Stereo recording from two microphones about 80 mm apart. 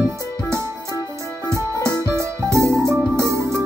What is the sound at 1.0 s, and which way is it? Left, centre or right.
Music, left.